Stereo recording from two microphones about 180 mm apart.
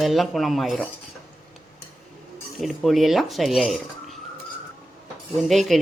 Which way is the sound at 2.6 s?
Centre (ahead or behind).